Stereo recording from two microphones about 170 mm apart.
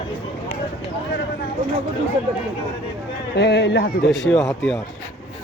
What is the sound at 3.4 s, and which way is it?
Speech, 80° left.